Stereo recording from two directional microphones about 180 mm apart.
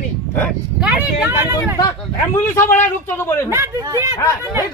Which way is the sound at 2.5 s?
15° left (ahead or behind).